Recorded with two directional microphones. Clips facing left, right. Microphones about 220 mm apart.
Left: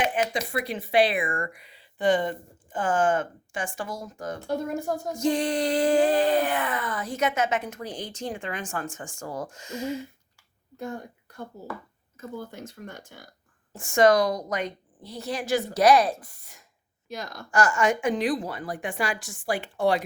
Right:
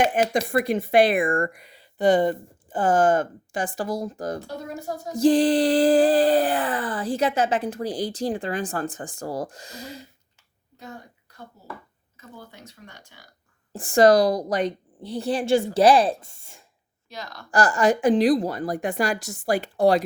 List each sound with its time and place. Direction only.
0.0 s speech: 40° right (ahead or behind)
12.1 s speech: 50° left (ahead or behind)
13.7 s speech: 35° right (ahead or behind)
17.1 s speech: 50° left (ahead or behind)
17.5 s speech: 35° right (ahead or behind)